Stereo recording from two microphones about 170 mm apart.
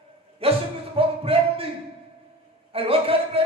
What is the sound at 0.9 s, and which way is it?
Music, 35° right (ahead or behind).